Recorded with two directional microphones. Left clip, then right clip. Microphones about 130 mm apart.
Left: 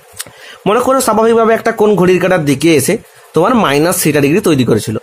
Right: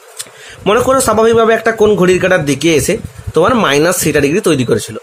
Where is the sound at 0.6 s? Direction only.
25° left (ahead or behind).